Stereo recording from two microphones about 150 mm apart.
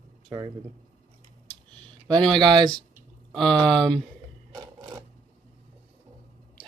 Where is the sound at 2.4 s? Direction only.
30° right (ahead or behind).